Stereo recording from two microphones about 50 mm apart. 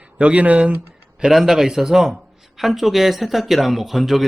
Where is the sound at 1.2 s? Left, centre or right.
Centre.